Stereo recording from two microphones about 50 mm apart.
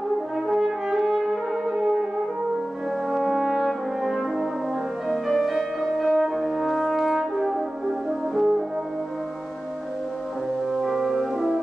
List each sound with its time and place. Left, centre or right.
0.5 s brass instrument: centre
3.1 s brass instrument: centre
5.1 s french horn: centre
10.8 s music: centre